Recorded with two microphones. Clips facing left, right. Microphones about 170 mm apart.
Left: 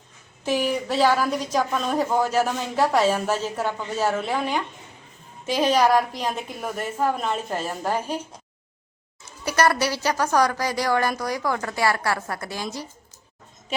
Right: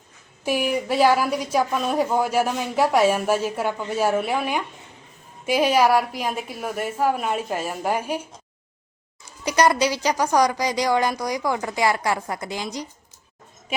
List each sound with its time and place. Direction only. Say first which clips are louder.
0.4 s speech: right 1 dB; 10° right (ahead or behind)
9.4 s speech: right 2 dB; 15° right (ahead or behind)